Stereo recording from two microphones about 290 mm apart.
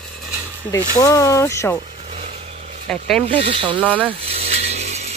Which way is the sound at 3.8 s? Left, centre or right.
Centre.